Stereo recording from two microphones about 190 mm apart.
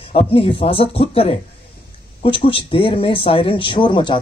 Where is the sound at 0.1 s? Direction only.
30° left (ahead or behind).